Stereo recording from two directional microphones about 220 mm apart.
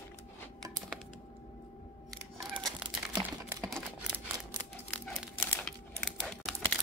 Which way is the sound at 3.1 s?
10° right (ahead or behind).